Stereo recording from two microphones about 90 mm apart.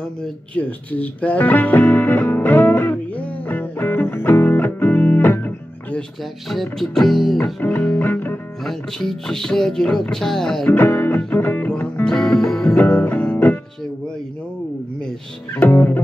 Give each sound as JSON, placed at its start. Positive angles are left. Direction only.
{"t": 0.6, "sound": "music", "side_deg": 15}
{"t": 6.5, "sound": "music", "side_deg": 0}
{"t": 7.6, "sound": "music", "side_deg": 20}
{"t": 8.6, "sound": "music", "side_deg": 5}
{"t": 10.7, "sound": "music", "side_deg": 25}
{"t": 12.7, "sound": "music", "side_deg": 15}
{"t": 15.5, "sound": "music", "side_deg": 25}